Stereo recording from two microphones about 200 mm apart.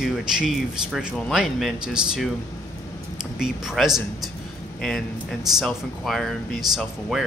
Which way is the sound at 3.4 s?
Centre (ahead or behind).